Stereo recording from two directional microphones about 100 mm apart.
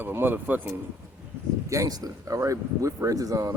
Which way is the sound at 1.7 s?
35° right (ahead or behind).